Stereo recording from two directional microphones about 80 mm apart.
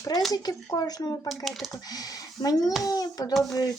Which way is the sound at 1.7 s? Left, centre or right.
Left.